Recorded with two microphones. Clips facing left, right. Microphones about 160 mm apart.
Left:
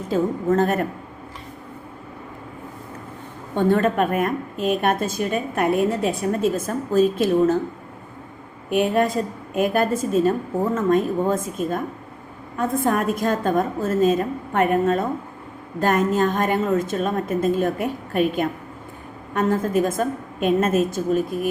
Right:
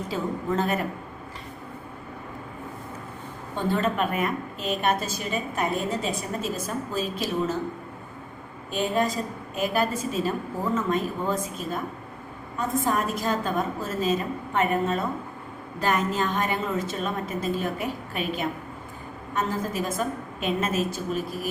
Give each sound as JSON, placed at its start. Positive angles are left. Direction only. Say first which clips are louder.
{"t": 0.1, "sound": "a woman's voice", "louder": "left 9 dB", "side_deg": 50}
{"t": 3.5, "sound": "a woman's voice", "louder": "left 7 dB", "side_deg": 55}
{"t": 8.7, "sound": "a woman's voice", "louder": "left 6 dB", "side_deg": 60}